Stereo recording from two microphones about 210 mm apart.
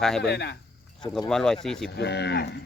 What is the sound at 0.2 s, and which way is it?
Speech, 55° left (ahead or behind).